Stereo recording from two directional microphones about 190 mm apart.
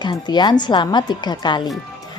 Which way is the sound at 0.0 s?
20° left (ahead or behind).